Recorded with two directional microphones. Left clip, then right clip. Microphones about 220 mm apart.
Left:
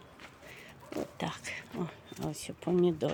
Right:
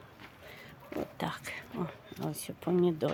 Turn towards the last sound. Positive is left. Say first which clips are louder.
# even
turn(degrees=0)  # may be behind; listen again after turning